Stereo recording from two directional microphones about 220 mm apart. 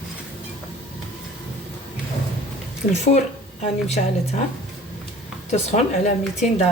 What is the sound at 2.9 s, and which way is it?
A woman's voice, 30° left (ahead or behind).